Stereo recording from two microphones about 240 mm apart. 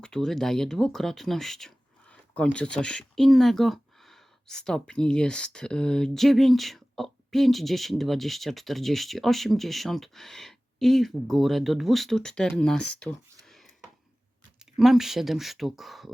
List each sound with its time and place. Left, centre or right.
0.0 s speech: centre
13.4 s a sound: centre
14.6 s speech: centre